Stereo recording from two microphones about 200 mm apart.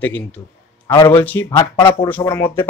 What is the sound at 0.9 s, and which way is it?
Speech, 20° left (ahead or behind).